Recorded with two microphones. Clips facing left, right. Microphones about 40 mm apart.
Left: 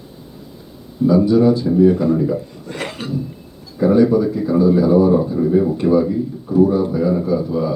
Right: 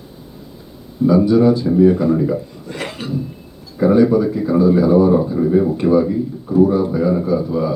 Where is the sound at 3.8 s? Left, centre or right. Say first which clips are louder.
Right 1 dB; right.